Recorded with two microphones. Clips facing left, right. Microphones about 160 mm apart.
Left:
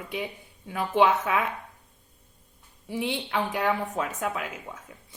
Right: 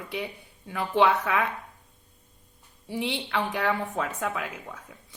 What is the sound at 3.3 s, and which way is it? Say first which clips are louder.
A woman's voice: left 1 dB; 20° left (ahead or behind).